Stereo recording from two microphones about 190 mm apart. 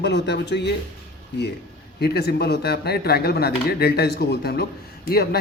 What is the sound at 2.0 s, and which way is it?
Speech, 60° left (ahead or behind).